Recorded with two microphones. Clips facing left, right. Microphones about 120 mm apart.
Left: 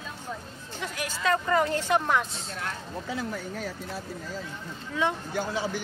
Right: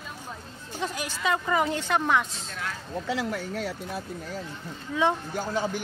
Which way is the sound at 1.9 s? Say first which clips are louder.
Right 1 dB; centre (ahead or behind).